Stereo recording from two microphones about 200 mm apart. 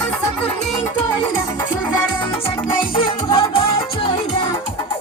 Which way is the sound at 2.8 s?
25° left (ahead or behind).